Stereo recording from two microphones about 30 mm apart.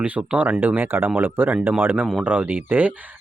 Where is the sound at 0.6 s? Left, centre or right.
Right.